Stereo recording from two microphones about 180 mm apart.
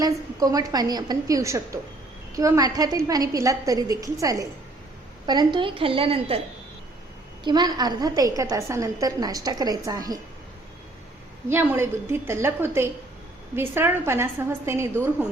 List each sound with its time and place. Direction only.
0.0 s a woman's voice: 20° right (ahead or behind)
7.4 s a woman's voice: 25° right (ahead or behind)
11.4 s a woman's voice: 10° right (ahead or behind)